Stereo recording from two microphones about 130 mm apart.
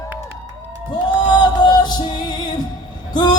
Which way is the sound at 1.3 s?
35° left (ahead or behind).